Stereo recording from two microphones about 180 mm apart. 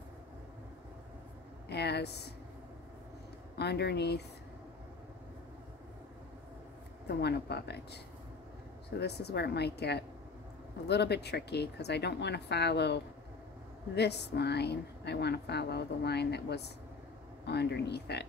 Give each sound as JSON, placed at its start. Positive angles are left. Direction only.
{"t": 1.7, "sound": "speech", "side_deg": 65}
{"t": 3.5, "sound": "a woman's voice", "side_deg": 65}
{"t": 7.1, "sound": "speech", "side_deg": 65}
{"t": 9.0, "sound": "a woman's voice", "side_deg": 65}